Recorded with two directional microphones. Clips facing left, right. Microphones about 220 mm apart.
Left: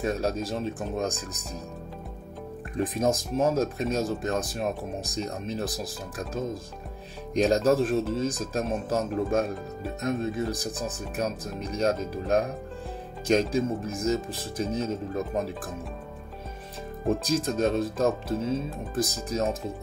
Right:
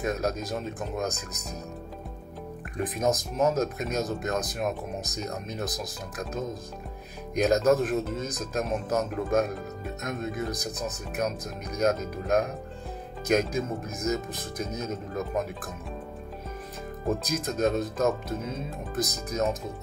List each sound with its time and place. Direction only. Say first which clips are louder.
0.0 s speech: left 1 dB; 30° left (ahead or behind)
2.8 s speech: left 1 dB; 30° left (ahead or behind)
17.2 s speech: left 1 dB; 30° left (ahead or behind)